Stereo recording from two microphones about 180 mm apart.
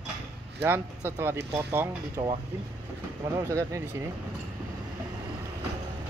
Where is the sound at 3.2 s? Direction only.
20° right (ahead or behind).